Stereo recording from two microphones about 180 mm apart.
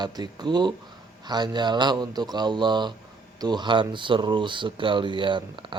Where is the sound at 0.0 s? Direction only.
25° right (ahead or behind).